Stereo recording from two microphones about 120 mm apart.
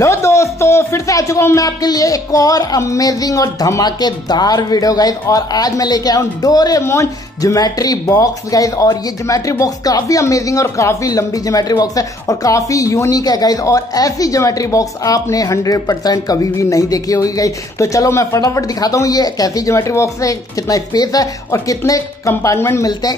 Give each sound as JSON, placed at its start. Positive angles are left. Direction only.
{"t": 0.0, "sound": "speech", "side_deg": 25}